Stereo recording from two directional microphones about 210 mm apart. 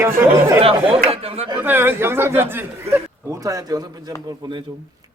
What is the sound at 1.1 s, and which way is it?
Speech, 30° right (ahead or behind).